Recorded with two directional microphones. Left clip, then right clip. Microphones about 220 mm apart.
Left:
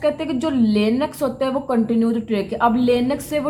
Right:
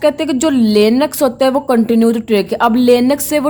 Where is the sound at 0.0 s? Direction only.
45° right (ahead or behind).